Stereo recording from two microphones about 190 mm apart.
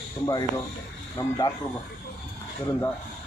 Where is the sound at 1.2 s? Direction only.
15° left (ahead or behind).